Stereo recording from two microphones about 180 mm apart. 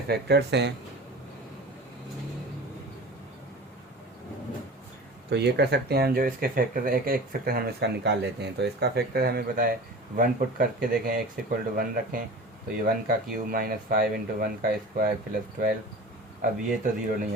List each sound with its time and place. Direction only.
0.1 s speech: 65° right (ahead or behind)
5.3 s speech: 70° right (ahead or behind); by 17.2 s 45° right (ahead or behind)